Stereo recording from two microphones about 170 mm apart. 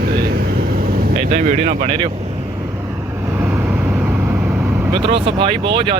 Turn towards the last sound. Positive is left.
turn(degrees=-30)  # may be behind; listen again after turning